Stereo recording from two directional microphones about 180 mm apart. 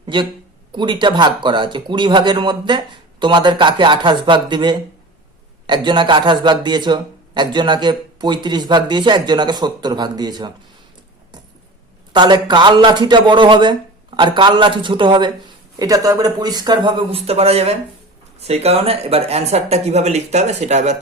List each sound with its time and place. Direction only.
0.0 s a sound: 25° right (ahead or behind)
0.7 s a man's voice: 25° right (ahead or behind)
12.1 s a man's voice: 25° right (ahead or behind)